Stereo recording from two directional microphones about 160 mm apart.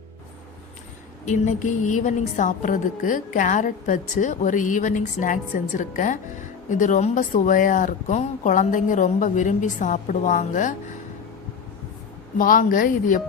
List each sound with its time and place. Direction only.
1.2 s a woman's voice: 50° left (ahead or behind)
12.4 s speech: 60° left (ahead or behind)